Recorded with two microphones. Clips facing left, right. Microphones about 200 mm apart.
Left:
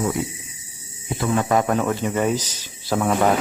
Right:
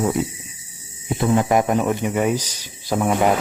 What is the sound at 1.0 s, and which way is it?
Speech, 25° right (ahead or behind).